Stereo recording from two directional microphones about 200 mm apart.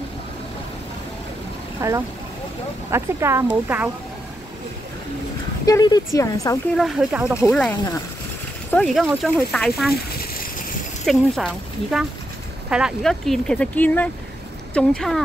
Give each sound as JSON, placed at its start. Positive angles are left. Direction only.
{"t": 1.8, "sound": "speech", "side_deg": -15}
{"t": 5.7, "sound": "speech", "side_deg": 20}
{"t": 6.8, "sound": "speech", "side_deg": -5}
{"t": 7.3, "sound": "speech", "side_deg": 15}
{"t": 8.6, "sound": "speech", "side_deg": 5}
{"t": 11.1, "sound": "speech", "side_deg": 0}